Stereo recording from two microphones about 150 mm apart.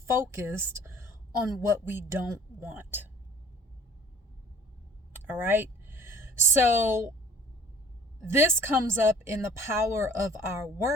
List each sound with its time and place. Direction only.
0.0 s a woman's voice: 15° right (ahead or behind)
5.1 s a sound: 15° right (ahead or behind)
8.2 s a woman's voice: 15° right (ahead or behind)